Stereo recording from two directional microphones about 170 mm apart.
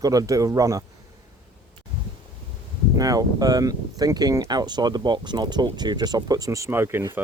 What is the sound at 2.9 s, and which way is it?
Speech, 20° right (ahead or behind).